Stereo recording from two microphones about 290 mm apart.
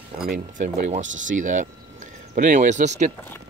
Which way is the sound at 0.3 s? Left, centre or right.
Right.